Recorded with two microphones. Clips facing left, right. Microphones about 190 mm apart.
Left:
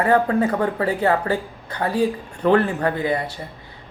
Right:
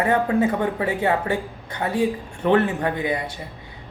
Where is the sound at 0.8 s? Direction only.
25° right (ahead or behind).